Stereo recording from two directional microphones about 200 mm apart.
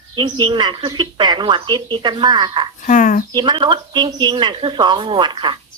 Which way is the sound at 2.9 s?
40° left (ahead or behind).